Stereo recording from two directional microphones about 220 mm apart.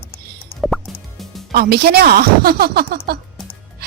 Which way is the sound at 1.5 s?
45° right (ahead or behind).